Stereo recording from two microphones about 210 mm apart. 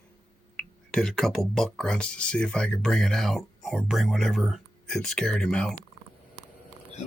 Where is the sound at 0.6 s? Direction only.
5° left (ahead or behind).